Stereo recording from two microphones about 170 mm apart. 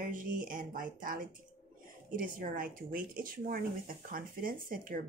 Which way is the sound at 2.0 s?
55° right (ahead or behind).